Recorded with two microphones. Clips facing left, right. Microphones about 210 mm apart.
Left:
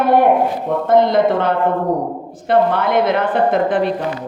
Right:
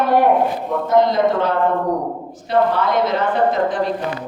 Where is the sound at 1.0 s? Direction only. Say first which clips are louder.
Left 2 dB; 55° left (ahead or behind).